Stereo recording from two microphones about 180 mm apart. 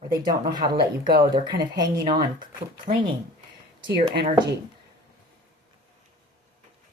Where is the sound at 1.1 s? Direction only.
60° right (ahead or behind).